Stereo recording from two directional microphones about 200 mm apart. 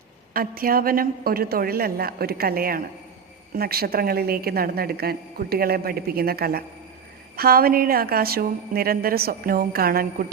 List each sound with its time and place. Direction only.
0.3 s a woman's voice: 45° right (ahead or behind)